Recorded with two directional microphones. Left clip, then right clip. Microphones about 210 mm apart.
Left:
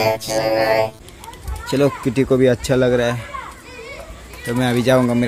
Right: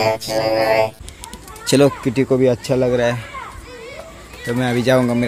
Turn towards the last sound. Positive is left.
turn(degrees=0)  # may be behind; listen again after turning